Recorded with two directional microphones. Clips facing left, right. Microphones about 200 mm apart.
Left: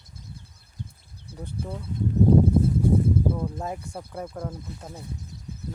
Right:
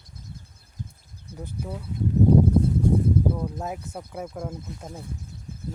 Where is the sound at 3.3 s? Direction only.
Centre (ahead or behind).